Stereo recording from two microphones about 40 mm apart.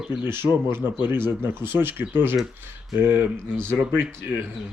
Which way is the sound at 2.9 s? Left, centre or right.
Right.